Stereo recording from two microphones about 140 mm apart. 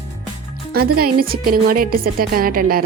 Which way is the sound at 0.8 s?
90° right.